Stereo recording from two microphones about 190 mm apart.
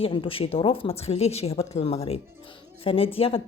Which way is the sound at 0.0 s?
25° left (ahead or behind).